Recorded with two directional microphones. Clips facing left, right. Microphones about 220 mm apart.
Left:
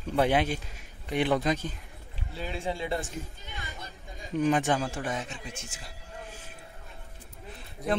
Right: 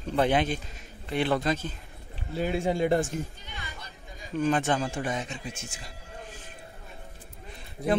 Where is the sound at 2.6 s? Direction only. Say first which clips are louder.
Right 6 dB; 45° right (ahead or behind).